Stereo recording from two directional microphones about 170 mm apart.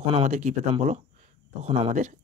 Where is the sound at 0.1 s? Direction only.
45° right (ahead or behind).